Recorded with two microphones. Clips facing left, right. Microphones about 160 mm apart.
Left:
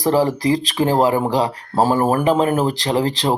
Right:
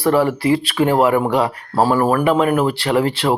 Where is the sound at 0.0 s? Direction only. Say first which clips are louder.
Right 1 dB; 35° left (ahead or behind).